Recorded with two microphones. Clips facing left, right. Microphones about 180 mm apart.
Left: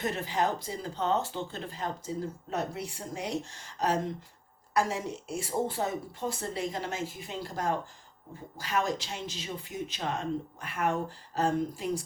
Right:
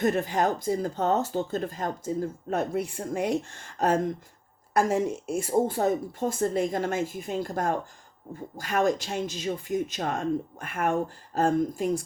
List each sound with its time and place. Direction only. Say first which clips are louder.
0.0 s speech: right 6 dB; 50° right (ahead or behind)